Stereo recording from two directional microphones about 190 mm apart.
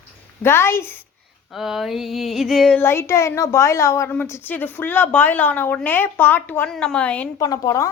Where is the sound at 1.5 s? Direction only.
Centre (ahead or behind).